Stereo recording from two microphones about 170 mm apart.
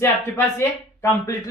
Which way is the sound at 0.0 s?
15° left (ahead or behind).